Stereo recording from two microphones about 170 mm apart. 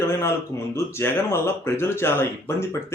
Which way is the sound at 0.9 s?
15° left (ahead or behind).